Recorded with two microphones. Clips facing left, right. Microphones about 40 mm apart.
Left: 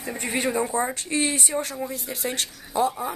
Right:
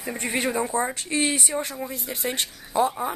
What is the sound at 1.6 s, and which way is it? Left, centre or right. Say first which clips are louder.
Speech: left 1 dB; centre.